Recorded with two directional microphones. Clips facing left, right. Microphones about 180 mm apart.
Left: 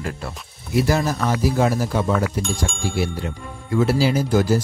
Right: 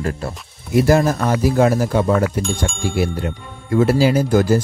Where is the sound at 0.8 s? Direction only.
50° right (ahead or behind).